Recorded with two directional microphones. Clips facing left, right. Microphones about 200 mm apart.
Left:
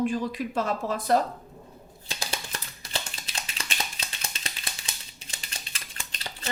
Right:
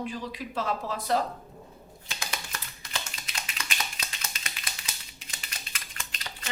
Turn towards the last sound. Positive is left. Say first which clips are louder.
# left 3 dB
turn(degrees=30)  # may be behind; listen again after turning